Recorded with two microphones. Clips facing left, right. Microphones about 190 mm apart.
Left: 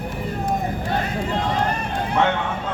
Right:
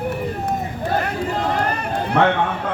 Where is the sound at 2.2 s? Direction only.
65° right (ahead or behind).